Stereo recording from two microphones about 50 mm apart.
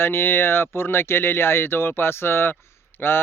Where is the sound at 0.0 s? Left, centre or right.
Left.